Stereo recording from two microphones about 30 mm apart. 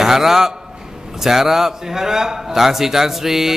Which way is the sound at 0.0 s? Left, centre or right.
Centre.